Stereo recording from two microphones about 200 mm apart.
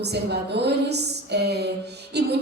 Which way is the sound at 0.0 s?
55° right (ahead or behind).